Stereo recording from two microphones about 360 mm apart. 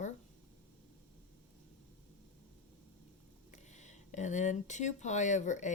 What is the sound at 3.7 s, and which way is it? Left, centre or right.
Speech, centre.